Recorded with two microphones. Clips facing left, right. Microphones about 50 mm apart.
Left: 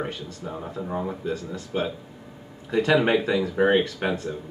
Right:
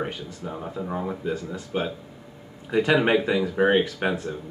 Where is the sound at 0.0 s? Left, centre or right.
Centre.